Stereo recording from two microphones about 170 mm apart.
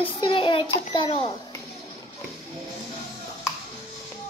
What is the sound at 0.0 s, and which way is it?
A child's voice, 30° left (ahead or behind).